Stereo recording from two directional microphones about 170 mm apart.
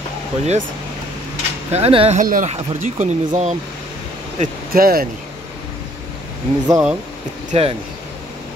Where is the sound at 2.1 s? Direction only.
50° right (ahead or behind).